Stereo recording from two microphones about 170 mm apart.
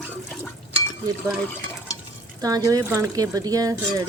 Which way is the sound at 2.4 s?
20° right (ahead or behind).